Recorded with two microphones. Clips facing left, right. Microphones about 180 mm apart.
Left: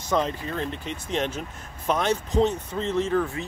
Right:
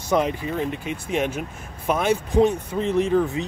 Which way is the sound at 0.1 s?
15° right (ahead or behind).